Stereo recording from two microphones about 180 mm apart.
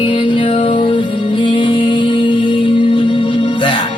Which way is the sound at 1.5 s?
30° left (ahead or behind).